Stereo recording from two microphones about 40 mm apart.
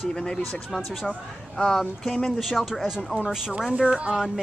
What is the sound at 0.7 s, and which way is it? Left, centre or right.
Speech, centre.